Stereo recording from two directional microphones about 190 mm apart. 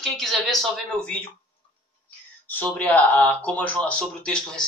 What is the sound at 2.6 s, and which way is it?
Speech, 10° left (ahead or behind).